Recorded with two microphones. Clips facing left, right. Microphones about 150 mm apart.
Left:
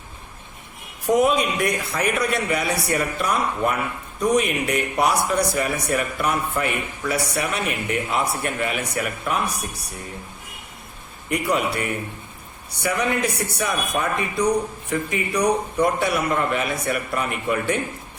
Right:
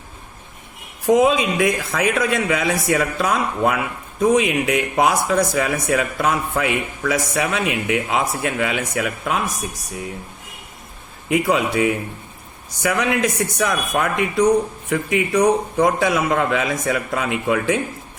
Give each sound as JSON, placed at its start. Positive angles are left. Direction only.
{"t": 1.0, "sound": "a man's voice", "side_deg": -90}
{"t": 11.3, "sound": "a man's voice", "side_deg": -90}